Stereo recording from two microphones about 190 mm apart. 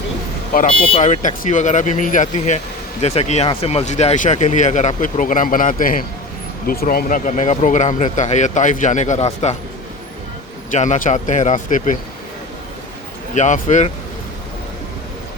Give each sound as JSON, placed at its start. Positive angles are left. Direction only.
{"t": 0.5, "sound": "speech", "side_deg": 50}
{"t": 0.9, "sound": "speech", "side_deg": 40}
{"t": 10.7, "sound": "speech", "side_deg": 40}
{"t": 13.3, "sound": "speech", "side_deg": 40}